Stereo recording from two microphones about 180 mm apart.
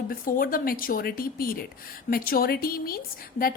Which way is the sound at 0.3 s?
50° left (ahead or behind).